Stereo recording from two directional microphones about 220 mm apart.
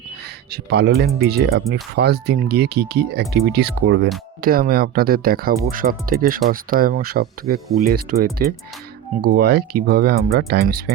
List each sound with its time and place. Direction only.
0.5 s speech: 45° right (ahead or behind)
4.4 s speech: 40° right (ahead or behind)